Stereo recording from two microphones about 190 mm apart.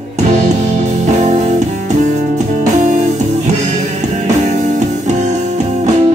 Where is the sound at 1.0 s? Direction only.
40° right (ahead or behind).